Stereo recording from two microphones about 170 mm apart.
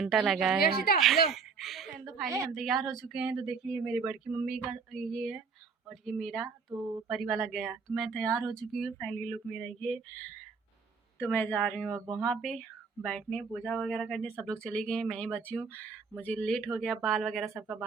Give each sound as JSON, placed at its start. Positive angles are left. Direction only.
{"t": 0.0, "sound": "speech", "side_deg": 0}
{"t": 0.6, "sound": "a woman's voice", "side_deg": 65}
{"t": 0.9, "sound": "a woman's voice", "side_deg": 0}